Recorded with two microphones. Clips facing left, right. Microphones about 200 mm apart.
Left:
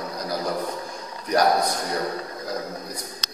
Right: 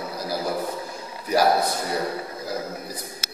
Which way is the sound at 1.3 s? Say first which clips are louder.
Even; 5° right (ahead or behind).